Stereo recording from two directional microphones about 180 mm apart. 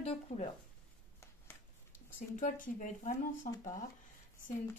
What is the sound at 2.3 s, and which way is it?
Speech, 45° left (ahead or behind).